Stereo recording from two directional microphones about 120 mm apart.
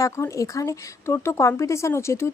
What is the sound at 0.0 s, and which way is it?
Speech, 25° left (ahead or behind).